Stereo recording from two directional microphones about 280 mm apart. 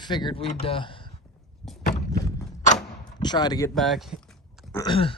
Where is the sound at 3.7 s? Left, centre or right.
Centre.